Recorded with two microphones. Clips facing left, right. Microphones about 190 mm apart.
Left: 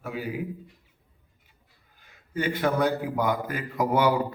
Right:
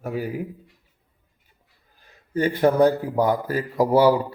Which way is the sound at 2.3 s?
35° right (ahead or behind).